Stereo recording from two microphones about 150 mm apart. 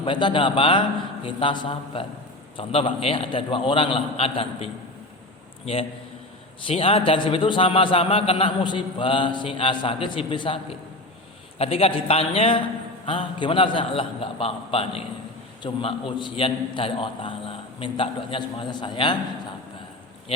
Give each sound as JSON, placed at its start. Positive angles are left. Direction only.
{"t": 0.0, "sound": "a man's voice", "side_deg": 30}
{"t": 6.7, "sound": "a man's voice", "side_deg": 35}